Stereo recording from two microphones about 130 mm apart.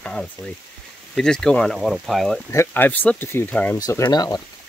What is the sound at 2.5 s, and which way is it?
Speech, 20° left (ahead or behind).